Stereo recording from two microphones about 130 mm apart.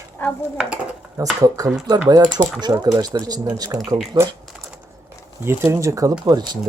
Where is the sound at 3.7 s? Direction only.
20° right (ahead or behind).